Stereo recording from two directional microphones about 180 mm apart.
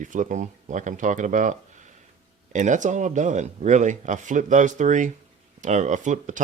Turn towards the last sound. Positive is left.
turn(degrees=-45)  # may be behind; listen again after turning